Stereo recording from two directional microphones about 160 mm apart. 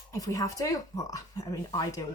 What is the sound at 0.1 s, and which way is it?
A woman's voice, 20° left (ahead or behind).